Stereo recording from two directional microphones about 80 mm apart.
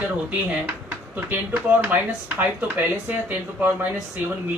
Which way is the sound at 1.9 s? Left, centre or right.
Right.